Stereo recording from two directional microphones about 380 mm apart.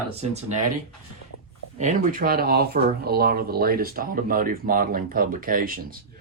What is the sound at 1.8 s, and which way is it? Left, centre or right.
Speech, centre.